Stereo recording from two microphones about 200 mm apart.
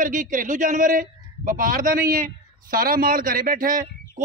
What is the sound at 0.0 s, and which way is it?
A man's voice, 40° right (ahead or behind).